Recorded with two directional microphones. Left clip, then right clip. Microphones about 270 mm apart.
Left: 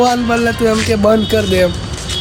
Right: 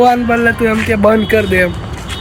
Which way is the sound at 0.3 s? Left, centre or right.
Centre.